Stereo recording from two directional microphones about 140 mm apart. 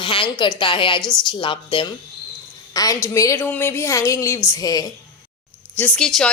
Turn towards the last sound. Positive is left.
turn(degrees=5)  # may be behind; listen again after turning